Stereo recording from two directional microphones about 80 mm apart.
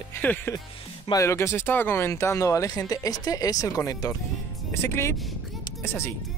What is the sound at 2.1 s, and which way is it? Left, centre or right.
Speech, left.